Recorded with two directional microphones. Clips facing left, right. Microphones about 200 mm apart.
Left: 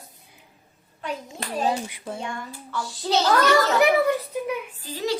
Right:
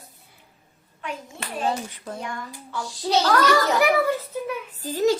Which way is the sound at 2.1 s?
25° left (ahead or behind).